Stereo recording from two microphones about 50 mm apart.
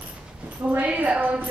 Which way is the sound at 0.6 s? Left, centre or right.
Right.